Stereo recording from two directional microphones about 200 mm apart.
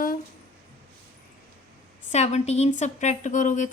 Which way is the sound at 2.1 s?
35° left (ahead or behind).